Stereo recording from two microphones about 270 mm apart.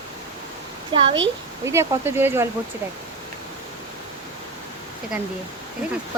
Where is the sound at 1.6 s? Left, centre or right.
Centre.